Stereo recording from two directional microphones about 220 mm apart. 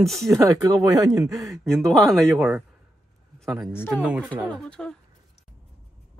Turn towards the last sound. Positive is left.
turn(degrees=5)  # may be behind; listen again after turning